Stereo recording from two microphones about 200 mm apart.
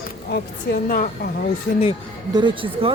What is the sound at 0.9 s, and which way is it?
Speech, 45° left (ahead or behind).